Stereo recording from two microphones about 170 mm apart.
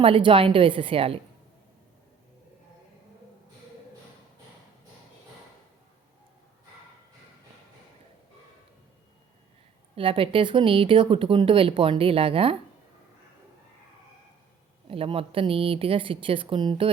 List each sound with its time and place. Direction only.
0.0 s speech: 30° right (ahead or behind)
9.9 s speech: 30° right (ahead or behind)
14.8 s speech: 35° right (ahead or behind)